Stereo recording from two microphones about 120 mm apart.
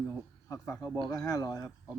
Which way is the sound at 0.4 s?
25° left (ahead or behind).